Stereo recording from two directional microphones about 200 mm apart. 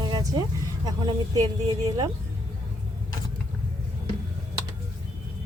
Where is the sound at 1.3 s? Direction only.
20° right (ahead or behind).